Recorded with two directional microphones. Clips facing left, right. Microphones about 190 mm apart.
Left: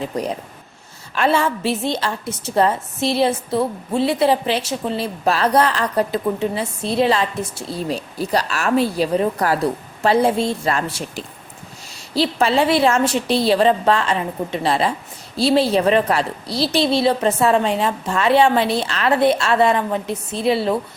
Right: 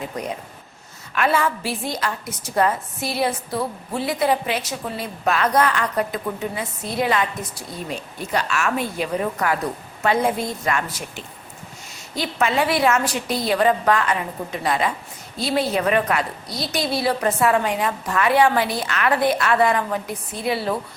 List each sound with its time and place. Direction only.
1.1 s a woman's voice: 30° left (ahead or behind)